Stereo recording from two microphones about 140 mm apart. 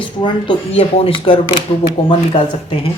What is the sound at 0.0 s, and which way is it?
Speech, 35° left (ahead or behind).